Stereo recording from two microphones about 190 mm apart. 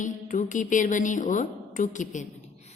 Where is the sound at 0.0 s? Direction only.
40° left (ahead or behind).